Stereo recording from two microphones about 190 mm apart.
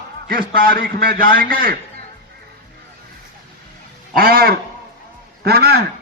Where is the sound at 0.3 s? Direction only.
50° right (ahead or behind).